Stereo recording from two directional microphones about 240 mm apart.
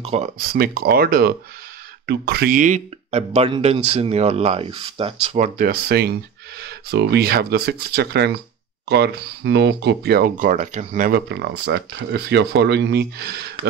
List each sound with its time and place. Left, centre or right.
0.0 s speech: right